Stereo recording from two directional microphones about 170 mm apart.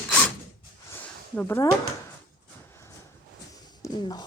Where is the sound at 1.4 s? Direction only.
15° left (ahead or behind).